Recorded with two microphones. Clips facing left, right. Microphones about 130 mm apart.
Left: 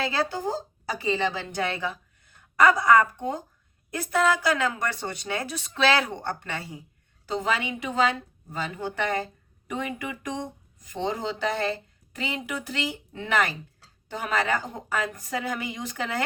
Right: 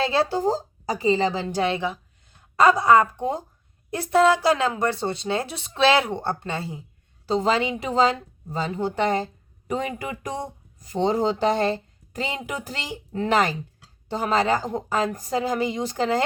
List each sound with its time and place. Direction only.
0.0 s a woman's voice: 25° right (ahead or behind)